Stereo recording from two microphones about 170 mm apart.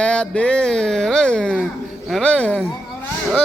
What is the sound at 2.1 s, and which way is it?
Speech, 5° left (ahead or behind).